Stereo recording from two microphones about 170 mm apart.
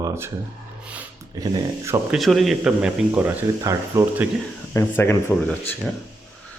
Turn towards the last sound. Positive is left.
turn(degrees=10)  # may be behind; listen again after turning